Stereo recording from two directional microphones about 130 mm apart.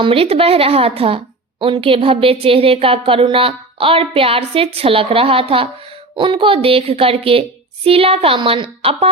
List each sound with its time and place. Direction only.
0.0 s a woman's voice: 45° right (ahead or behind)